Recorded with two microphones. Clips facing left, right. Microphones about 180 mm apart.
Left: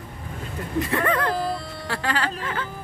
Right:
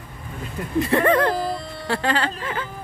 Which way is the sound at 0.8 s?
30° right (ahead or behind).